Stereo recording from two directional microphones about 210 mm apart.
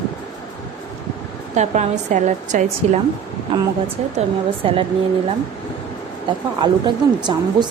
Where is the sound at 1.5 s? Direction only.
35° right (ahead or behind).